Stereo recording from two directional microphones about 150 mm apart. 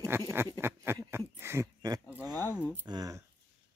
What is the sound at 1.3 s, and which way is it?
A man's voice, 15° right (ahead or behind).